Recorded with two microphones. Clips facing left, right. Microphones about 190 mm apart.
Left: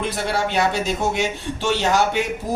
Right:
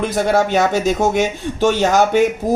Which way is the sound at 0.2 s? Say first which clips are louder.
Right 7 dB; 45° right (ahead or behind).